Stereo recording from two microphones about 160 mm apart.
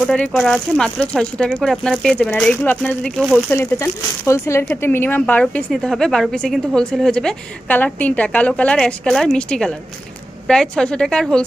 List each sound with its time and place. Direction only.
0.1 s speech: 5° left (ahead or behind)
3.5 s a woman's voice: 15° left (ahead or behind)